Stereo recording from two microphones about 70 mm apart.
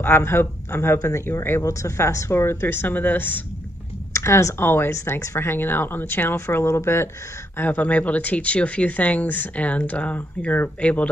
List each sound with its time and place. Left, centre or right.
0.0 s speech: left
1.2 s speech: left
1.6 s speech: left
4.1 s speech: left
4.6 s speech: left
7.5 s speech: left